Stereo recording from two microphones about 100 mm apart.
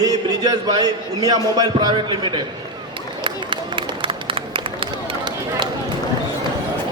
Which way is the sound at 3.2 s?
55° right (ahead or behind).